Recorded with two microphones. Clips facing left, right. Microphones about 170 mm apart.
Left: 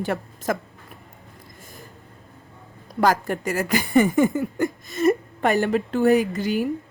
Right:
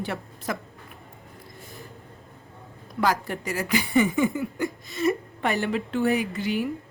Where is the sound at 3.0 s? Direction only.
45° left (ahead or behind).